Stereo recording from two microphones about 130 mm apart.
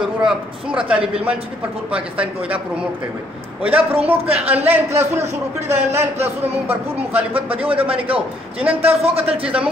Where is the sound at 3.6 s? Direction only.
10° right (ahead or behind).